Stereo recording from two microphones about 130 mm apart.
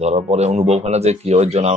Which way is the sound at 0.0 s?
55° right (ahead or behind).